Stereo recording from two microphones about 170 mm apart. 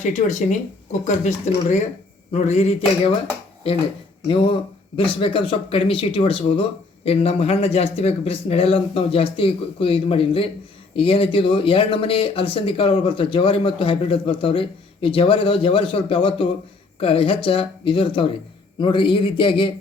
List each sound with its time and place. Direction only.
0.0 s speech: 45° left (ahead or behind)
4.3 s a man's voice: 30° left (ahead or behind)